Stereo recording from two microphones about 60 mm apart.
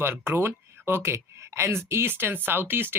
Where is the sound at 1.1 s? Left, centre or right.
Right.